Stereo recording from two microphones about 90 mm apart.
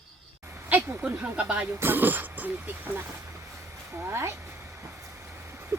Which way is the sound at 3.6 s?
30° right (ahead or behind).